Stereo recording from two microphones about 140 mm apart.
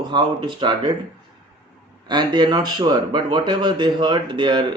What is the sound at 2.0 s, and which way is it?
Speech, 30° right (ahead or behind).